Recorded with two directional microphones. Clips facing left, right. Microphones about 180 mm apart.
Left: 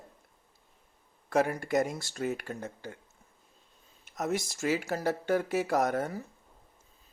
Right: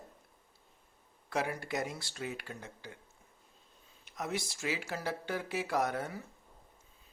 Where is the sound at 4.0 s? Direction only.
45° left (ahead or behind).